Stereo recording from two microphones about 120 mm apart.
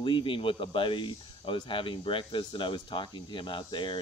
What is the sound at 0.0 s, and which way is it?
Speech, 45° left (ahead or behind).